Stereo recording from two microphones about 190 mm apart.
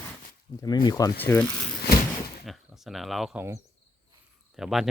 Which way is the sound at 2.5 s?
Centre (ahead or behind).